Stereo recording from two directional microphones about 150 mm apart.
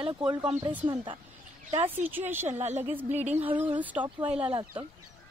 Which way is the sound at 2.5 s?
50° right (ahead or behind).